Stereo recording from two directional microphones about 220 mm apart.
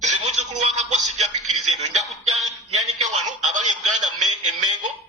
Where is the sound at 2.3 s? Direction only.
30° right (ahead or behind).